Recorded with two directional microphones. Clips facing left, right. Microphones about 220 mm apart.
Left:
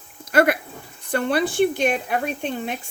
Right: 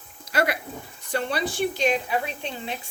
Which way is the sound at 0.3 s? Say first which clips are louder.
Left 7 dB; 50° left (ahead or behind).